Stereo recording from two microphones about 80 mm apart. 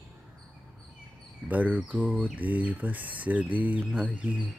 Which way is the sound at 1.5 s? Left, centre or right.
Centre.